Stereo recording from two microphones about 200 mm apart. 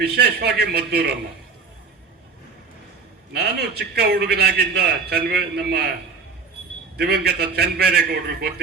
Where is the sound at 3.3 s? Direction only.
55° right (ahead or behind).